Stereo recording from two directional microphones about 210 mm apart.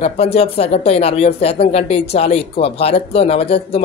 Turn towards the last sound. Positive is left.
turn(degrees=30)  # may be behind; listen again after turning